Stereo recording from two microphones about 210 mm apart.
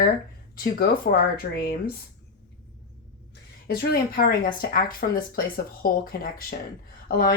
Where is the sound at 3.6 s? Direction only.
45° left (ahead or behind).